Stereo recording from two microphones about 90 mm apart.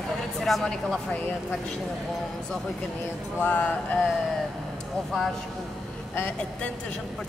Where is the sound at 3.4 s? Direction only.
15° left (ahead or behind).